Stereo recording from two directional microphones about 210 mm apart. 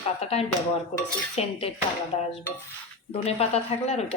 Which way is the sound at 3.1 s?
30° left (ahead or behind).